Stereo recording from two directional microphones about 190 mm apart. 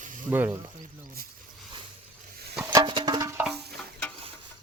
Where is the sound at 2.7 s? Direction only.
25° right (ahead or behind).